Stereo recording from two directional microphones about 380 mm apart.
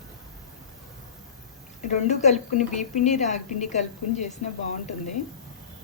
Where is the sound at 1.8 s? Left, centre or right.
Centre.